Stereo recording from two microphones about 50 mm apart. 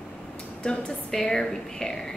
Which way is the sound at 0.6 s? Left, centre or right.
Centre.